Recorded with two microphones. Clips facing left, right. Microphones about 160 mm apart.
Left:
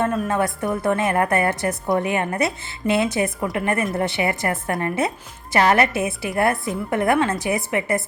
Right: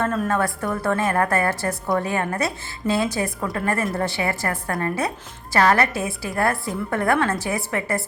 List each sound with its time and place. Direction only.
0.0 s a woman's voice: 15° left (ahead or behind)